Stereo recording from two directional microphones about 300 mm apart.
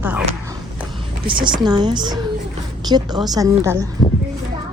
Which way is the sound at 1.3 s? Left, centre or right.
Centre.